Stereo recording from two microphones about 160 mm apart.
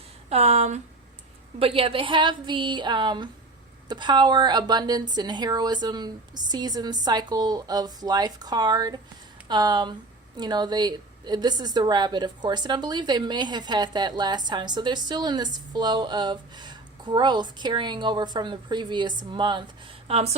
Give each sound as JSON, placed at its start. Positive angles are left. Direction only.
{"t": 0.3, "sound": "a woman's voice", "side_deg": -40}